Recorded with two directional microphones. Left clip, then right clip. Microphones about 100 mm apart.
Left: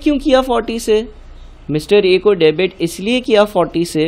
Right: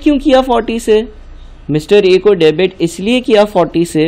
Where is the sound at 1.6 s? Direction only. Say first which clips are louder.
Right 3 dB; 10° right (ahead or behind).